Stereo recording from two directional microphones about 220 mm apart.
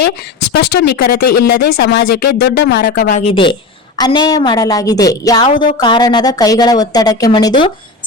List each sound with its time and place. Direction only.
0.8 s speech: 40° left (ahead or behind)
2.9 s a woman's voice: 35° left (ahead or behind); by 7.5 s 20° left (ahead or behind)